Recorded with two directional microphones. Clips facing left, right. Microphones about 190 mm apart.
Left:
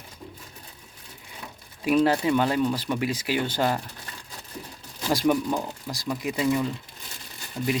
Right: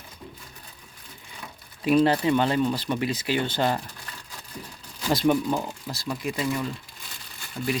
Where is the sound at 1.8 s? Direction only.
10° left (ahead or behind).